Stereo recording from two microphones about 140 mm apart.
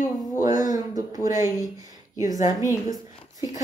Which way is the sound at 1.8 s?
25° right (ahead or behind).